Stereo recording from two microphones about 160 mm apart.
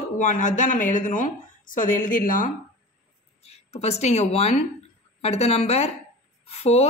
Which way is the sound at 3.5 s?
40° left (ahead or behind).